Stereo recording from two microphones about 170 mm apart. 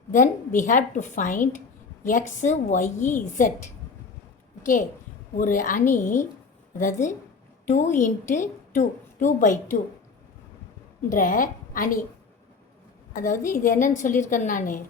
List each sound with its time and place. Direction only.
0.1 s a woman's voice: 50° left (ahead or behind)
5.4 s a woman's voice: 50° left (ahead or behind)
11.1 s a woman's voice: 50° left (ahead or behind)
13.1 s a woman's voice: 50° left (ahead or behind)